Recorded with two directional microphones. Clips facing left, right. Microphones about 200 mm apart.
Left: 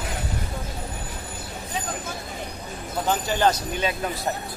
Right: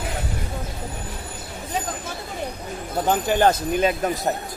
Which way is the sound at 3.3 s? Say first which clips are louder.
Right 5 dB; 50° right (ahead or behind).